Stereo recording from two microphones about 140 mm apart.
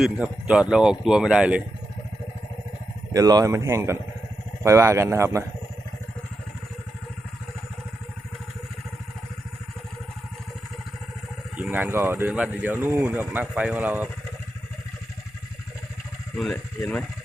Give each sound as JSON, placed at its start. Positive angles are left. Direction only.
{"t": 0.0, "sound": "speech", "side_deg": -5}
{"t": 3.1, "sound": "speech", "side_deg": -25}
{"t": 11.5, "sound": "speech", "side_deg": -10}
{"t": 16.4, "sound": "speech", "side_deg": 5}